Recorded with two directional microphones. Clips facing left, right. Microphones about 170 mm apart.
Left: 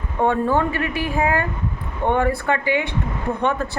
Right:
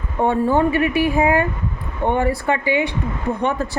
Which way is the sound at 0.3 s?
15° right (ahead or behind).